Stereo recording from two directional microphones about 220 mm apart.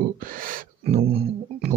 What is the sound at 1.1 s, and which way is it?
Music, 25° right (ahead or behind).